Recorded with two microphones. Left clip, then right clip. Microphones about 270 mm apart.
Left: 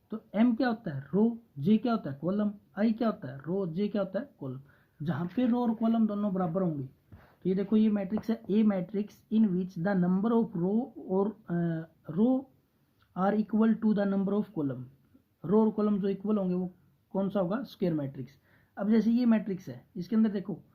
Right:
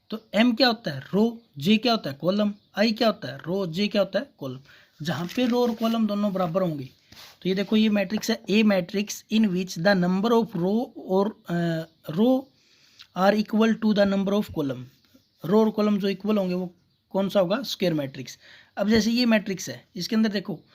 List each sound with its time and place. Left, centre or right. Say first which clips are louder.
0.1 s speech: right 6 dB; right